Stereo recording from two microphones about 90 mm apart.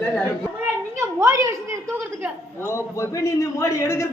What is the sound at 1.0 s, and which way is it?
A woman's voice, 35° right (ahead or behind).